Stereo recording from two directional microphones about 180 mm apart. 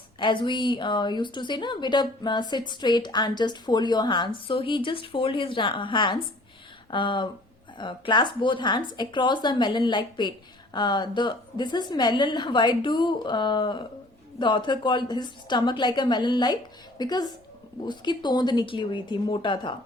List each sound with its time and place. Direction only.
0.2 s speech: 25° left (ahead or behind)